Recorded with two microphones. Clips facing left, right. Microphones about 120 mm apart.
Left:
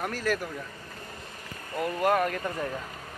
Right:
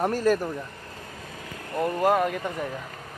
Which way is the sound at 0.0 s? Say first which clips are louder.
Right 8 dB; 35° right (ahead or behind).